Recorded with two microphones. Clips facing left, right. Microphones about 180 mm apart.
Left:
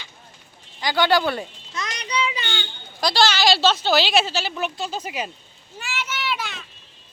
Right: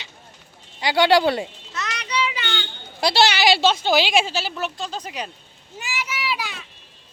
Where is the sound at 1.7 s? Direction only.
15° left (ahead or behind).